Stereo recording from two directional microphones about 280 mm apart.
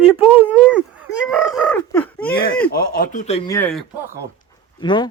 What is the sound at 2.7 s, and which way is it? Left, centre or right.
Speech, left.